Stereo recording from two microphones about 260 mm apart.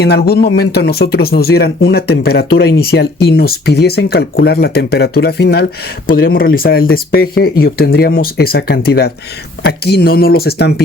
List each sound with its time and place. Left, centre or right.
0.0 s speech: left